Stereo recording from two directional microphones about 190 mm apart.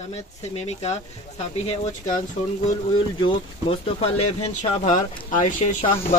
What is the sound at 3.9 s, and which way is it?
Speech, 30° left (ahead or behind).